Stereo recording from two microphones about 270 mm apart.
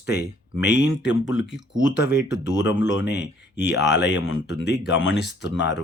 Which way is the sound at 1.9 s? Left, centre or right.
Left.